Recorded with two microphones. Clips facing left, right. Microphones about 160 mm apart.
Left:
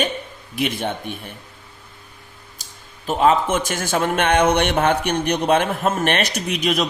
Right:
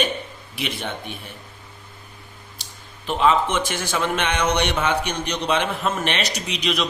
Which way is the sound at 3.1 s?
45° left (ahead or behind).